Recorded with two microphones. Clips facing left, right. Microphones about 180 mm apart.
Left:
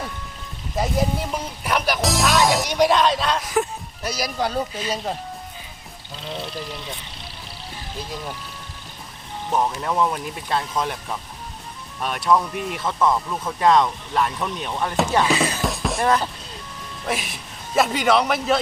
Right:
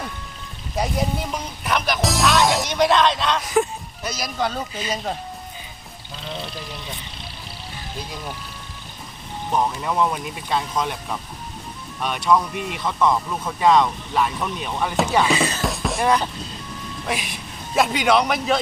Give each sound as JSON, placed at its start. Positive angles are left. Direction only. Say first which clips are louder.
{"t": 0.8, "sound": "a woman's voice", "louder": "left 1 dB", "side_deg": 5}
{"t": 9.5, "sound": "speech", "louder": "even", "side_deg": 0}
{"t": 11.9, "sound": "speech", "louder": "even", "side_deg": 0}